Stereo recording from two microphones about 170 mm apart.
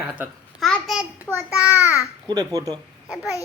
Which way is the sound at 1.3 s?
10° right (ahead or behind).